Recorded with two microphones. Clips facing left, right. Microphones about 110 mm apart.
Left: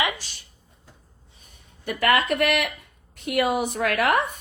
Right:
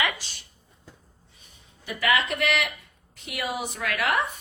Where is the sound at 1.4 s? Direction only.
55° left (ahead or behind).